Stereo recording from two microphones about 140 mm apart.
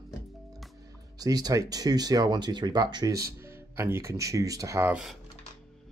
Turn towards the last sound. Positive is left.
turn(degrees=-5)  # may be behind; listen again after turning